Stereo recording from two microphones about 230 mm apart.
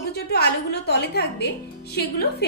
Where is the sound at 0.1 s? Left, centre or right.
Left.